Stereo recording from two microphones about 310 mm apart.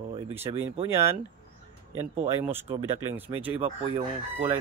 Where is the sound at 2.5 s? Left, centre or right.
Centre.